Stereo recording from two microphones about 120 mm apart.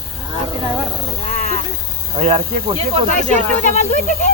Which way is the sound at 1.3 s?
60° left (ahead or behind).